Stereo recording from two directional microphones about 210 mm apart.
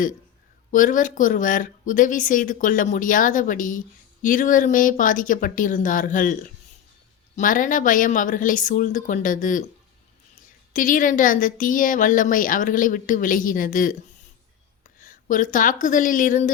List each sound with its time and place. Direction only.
0.7 s speech: 40° left (ahead or behind)
7.3 s speech: 40° left (ahead or behind)
10.7 s a woman's voice: 40° left (ahead or behind)